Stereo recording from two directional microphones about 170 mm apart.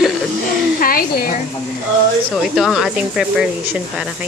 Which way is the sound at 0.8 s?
60° left (ahead or behind).